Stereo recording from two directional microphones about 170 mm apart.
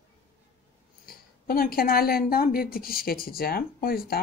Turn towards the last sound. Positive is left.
turn(degrees=60)  # may be behind; listen again after turning